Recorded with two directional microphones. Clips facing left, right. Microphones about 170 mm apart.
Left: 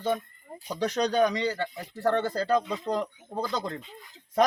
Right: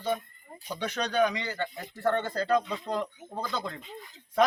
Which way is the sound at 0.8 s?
40° left (ahead or behind).